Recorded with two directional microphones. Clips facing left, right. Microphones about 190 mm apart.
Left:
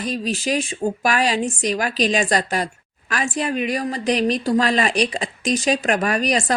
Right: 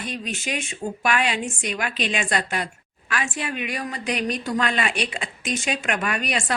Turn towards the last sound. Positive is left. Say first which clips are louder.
# left 6 dB
turn(degrees=40)  # may be behind; listen again after turning